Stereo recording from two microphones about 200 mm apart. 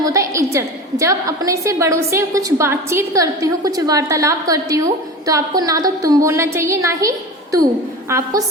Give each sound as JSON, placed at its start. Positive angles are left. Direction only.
{"t": 0.0, "sound": "a woman's voice", "side_deg": -15}
{"t": 8.1, "sound": "a woman's voice", "side_deg": -15}